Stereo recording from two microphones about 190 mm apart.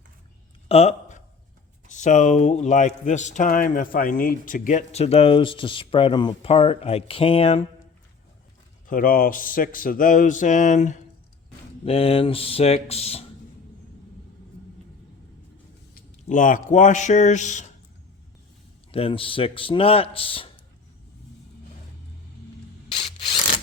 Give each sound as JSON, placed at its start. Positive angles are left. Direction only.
{"t": 0.7, "sound": "a sound", "side_deg": 35}
{"t": 1.9, "sound": "a man's voice", "side_deg": 40}
{"t": 8.9, "sound": "speech", "side_deg": 50}
{"t": 11.9, "sound": "a man's voice", "side_deg": 30}
{"t": 16.3, "sound": "a man's voice", "side_deg": 40}
{"t": 18.9, "sound": "a man's voice", "side_deg": 30}